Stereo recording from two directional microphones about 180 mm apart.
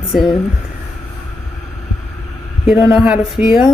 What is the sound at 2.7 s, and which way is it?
A woman's voice, 5° right (ahead or behind).